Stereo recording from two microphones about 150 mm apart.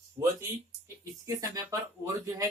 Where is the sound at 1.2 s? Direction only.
20° right (ahead or behind).